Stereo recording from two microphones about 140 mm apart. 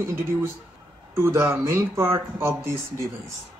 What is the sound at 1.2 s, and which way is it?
Speech, 15° right (ahead or behind).